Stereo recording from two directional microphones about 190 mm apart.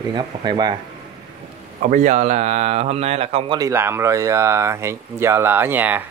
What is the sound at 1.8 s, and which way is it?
Speech, 40° right (ahead or behind).